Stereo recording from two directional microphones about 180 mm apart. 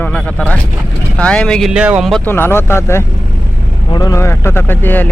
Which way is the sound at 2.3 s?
10° left (ahead or behind).